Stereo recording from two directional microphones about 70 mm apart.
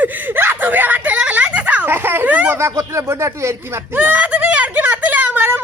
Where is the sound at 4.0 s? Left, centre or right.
Right.